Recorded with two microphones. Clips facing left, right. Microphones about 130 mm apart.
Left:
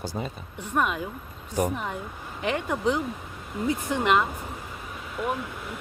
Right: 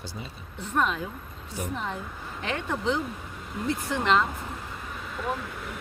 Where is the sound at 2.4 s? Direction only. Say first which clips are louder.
Left 4 dB; 15° left (ahead or behind).